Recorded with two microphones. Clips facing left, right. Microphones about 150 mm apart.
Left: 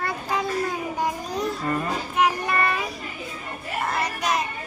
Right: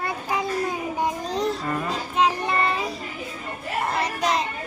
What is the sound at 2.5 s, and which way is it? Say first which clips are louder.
Child singing: right 1 dB; 25° right (ahead or behind).